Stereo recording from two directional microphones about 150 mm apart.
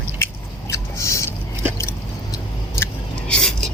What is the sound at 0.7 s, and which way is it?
Rodents, 20° left (ahead or behind).